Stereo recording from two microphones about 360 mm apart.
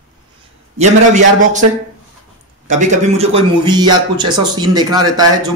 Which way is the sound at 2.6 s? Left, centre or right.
Centre.